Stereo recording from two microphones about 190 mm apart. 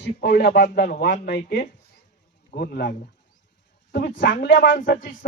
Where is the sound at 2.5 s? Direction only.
55° left (ahead or behind).